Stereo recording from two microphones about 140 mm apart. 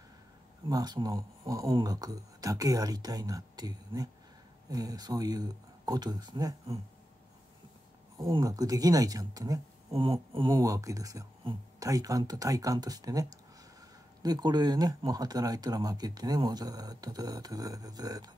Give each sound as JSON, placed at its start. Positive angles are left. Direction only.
{"t": 0.7, "sound": "speech", "side_deg": -30}
{"t": 8.2, "sound": "speech", "side_deg": -25}
{"t": 10.6, "sound": "speech", "side_deg": -25}